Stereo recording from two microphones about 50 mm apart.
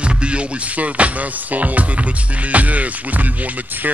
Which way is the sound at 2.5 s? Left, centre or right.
Right.